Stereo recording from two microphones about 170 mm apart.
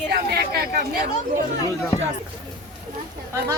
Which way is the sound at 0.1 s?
70° right (ahead or behind).